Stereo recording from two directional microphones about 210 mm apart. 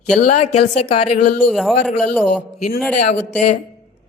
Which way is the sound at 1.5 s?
Centre (ahead or behind).